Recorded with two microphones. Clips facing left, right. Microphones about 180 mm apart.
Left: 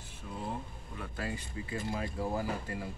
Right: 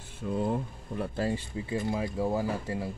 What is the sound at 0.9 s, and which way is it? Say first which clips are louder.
Speech: right 9 dB; 30° right (ahead or behind).